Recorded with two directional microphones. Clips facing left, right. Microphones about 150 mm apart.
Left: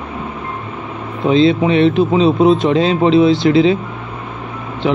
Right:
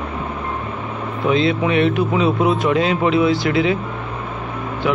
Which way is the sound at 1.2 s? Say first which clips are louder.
Left 5 dB; 30° left (ahead or behind).